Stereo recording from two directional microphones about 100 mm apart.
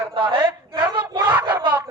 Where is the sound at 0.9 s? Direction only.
50° right (ahead or behind).